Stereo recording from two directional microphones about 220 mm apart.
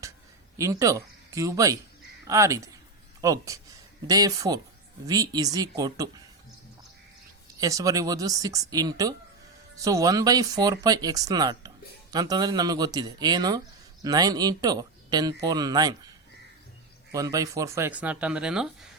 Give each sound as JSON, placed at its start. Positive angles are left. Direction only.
{"t": 0.6, "sound": "speech", "side_deg": -15}
{"t": 7.6, "sound": "speech", "side_deg": -15}
{"t": 17.1, "sound": "speech", "side_deg": -15}